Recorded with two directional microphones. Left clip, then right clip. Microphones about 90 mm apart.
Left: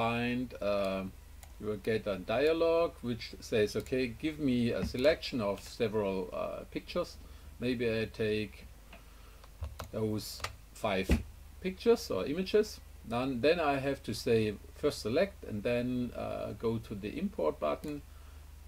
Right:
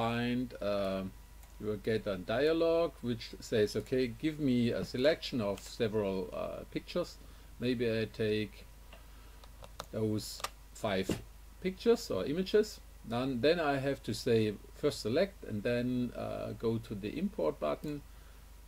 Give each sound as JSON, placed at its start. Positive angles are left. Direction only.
{"t": 0.0, "sound": "speech", "side_deg": -20}
{"t": 9.9, "sound": "speech", "side_deg": -20}